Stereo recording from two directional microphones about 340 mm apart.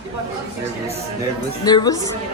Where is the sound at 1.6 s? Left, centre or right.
Centre.